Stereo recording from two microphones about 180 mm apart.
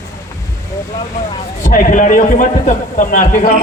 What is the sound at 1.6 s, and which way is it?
A man's voice, 45° left (ahead or behind).